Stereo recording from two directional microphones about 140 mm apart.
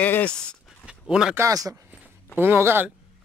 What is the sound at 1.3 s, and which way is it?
Speech, 25° right (ahead or behind).